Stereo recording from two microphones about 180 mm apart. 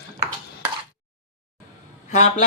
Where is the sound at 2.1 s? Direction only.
40° left (ahead or behind).